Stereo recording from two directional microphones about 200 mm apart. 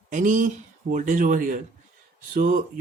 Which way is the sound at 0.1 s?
40° right (ahead or behind).